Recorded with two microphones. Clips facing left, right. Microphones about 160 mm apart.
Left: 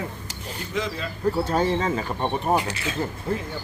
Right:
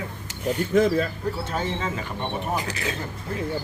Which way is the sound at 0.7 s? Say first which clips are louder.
Right 9 dB; 50° right (ahead or behind).